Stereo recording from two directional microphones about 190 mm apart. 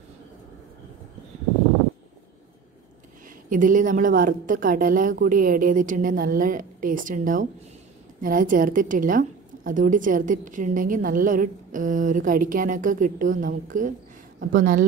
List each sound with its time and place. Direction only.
3.4 s a woman's voice: 45° right (ahead or behind)